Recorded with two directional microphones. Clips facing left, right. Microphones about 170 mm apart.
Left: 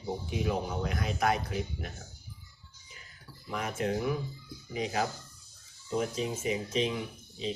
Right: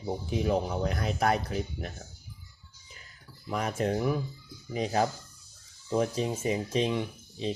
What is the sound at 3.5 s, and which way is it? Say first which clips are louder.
A man's voice: right 3 dB; 35° right (ahead or behind).